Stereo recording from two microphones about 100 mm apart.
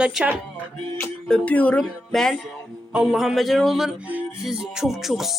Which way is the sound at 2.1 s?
5° left (ahead or behind).